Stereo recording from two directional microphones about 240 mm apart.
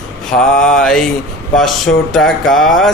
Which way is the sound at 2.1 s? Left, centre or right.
Centre.